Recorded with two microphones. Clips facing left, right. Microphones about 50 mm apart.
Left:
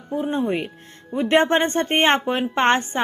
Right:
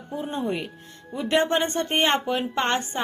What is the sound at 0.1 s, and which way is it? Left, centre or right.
A woman's voice, left.